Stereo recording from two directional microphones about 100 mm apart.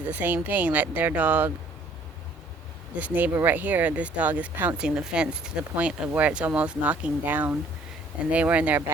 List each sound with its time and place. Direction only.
0.0 s speech: 15° right (ahead or behind)
2.9 s speech: 15° right (ahead or behind)